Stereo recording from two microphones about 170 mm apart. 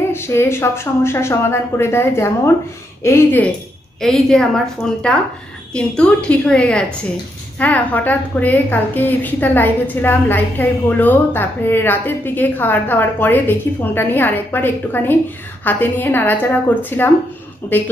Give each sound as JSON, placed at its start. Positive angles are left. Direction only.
{"t": 0.1, "sound": "a woman's voice", "side_deg": 15}
{"t": 4.0, "sound": "a woman's voice", "side_deg": 5}